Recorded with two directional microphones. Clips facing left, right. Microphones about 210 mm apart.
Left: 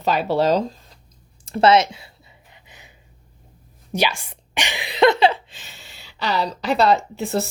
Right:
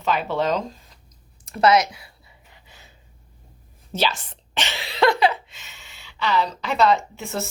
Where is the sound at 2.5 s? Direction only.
20° left (ahead or behind).